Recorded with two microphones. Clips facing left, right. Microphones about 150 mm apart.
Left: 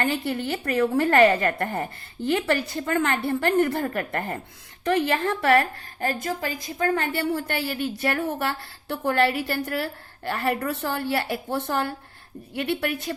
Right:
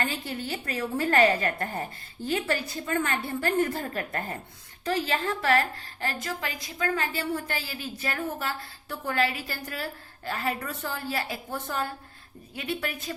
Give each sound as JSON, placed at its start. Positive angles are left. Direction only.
{"t": 0.0, "sound": "a woman's voice", "side_deg": 55}
{"t": 2.2, "sound": "a woman's voice", "side_deg": 70}
{"t": 6.9, "sound": "a woman's voice", "side_deg": 60}